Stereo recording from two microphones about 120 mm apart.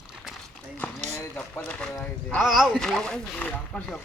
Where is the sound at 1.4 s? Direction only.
10° left (ahead or behind).